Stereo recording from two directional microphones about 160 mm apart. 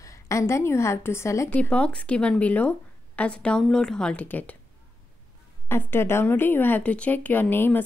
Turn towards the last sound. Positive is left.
turn(degrees=10)  # may be behind; listen again after turning